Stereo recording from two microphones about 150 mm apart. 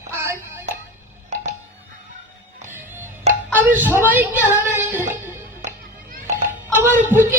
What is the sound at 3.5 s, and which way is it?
Music, 10° right (ahead or behind).